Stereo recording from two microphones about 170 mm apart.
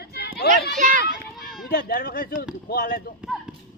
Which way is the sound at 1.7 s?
60° left (ahead or behind).